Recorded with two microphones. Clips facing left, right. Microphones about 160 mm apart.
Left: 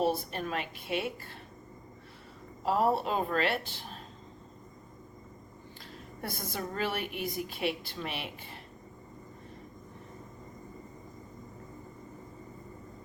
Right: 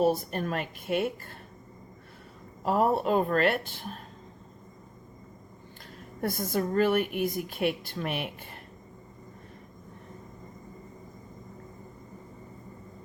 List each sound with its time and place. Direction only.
0.0 s a woman's voice: 45° right (ahead or behind)
2.6 s a woman's voice: 50° right (ahead or behind)
6.2 s a woman's voice: 50° right (ahead or behind)